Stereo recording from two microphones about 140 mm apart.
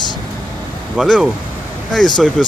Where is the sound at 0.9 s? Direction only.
5° left (ahead or behind).